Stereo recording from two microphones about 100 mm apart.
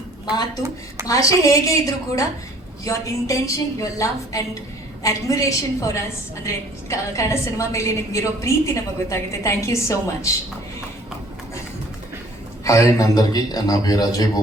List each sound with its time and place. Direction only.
1.0 s a woman's voice: 35° left (ahead or behind)
12.6 s a woman's voice: 35° left (ahead or behind)